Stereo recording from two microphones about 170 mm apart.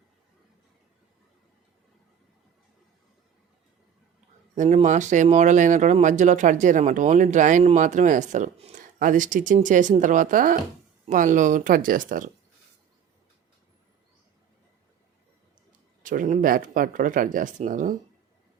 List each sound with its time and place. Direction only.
4.5 s speech: 45° right (ahead or behind)
16.0 s speech: 50° right (ahead or behind)